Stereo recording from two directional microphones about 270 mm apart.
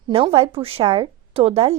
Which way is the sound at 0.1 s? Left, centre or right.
Right.